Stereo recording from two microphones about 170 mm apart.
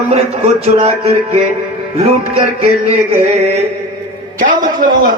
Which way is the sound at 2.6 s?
35° right (ahead or behind).